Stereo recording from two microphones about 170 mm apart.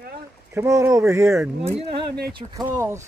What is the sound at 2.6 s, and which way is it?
Speech, 15° right (ahead or behind).